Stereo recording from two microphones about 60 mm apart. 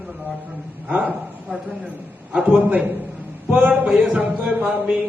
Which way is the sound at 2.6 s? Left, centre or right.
Right.